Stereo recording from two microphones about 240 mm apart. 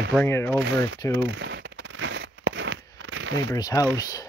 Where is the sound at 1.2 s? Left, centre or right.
Right.